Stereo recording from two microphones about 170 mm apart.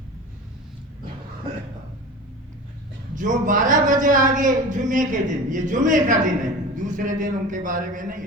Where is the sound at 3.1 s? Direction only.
50° right (ahead or behind).